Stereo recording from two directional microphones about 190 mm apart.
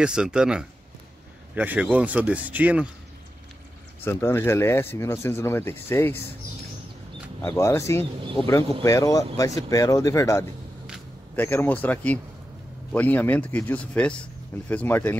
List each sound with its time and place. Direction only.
0.0 s speech: 5° right (ahead or behind)
4.0 s speech: 10° left (ahead or behind)
7.4 s speech: 15° left (ahead or behind)